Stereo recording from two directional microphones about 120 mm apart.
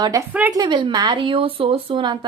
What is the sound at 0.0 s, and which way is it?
A woman's voice, 30° right (ahead or behind).